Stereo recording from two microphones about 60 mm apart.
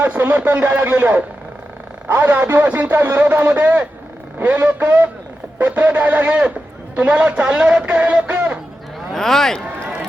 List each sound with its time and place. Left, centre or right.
0.0 s a man's voice: right
9.1 s a man's voice: centre